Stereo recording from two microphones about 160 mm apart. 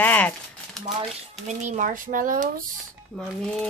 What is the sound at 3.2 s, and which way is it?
Speech, centre (ahead or behind).